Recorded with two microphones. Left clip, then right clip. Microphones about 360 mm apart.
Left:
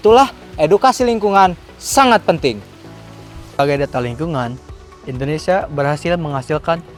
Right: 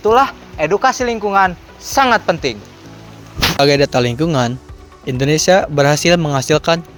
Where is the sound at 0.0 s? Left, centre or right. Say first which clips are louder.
Left 2 dB; left.